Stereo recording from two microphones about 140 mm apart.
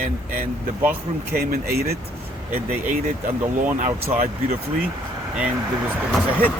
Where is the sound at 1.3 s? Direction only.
90° right.